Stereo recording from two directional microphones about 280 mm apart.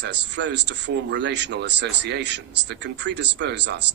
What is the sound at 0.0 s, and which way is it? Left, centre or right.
Speech, right.